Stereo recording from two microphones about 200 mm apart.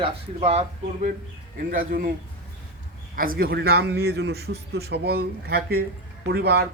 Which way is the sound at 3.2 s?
45° right (ahead or behind).